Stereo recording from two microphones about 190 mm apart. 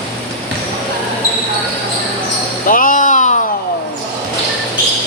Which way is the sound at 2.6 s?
45° left (ahead or behind).